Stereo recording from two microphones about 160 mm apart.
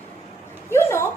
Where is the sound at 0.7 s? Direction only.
15° left (ahead or behind).